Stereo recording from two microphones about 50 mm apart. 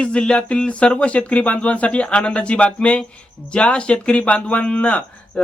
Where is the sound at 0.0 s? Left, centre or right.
Left.